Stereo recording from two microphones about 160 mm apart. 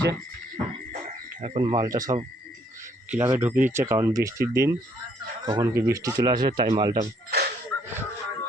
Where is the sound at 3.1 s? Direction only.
10° right (ahead or behind).